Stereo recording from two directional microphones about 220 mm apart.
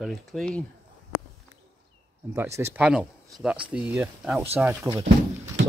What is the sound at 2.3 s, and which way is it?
Speech, 10° right (ahead or behind).